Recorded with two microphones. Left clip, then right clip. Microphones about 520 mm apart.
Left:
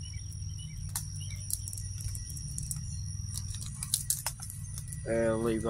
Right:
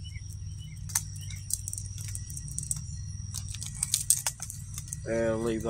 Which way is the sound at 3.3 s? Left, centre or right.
Left.